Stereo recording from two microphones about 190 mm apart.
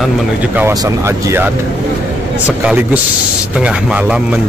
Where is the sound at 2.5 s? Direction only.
10° right (ahead or behind).